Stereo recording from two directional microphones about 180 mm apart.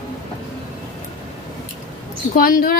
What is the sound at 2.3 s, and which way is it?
Speech, 50° left (ahead or behind).